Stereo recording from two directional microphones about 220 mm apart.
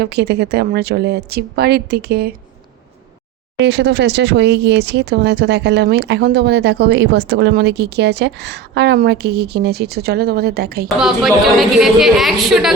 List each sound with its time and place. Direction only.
0.0 s speech: 50° right (ahead or behind)
3.6 s speech: 50° right (ahead or behind)
10.8 s a woman's voice: centre (ahead or behind)